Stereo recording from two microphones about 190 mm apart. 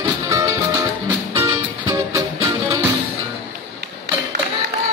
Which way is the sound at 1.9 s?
15° right (ahead or behind).